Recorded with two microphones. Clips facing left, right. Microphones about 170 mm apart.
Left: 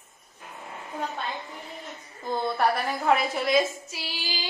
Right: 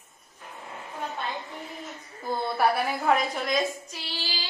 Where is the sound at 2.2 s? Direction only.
5° right (ahead or behind).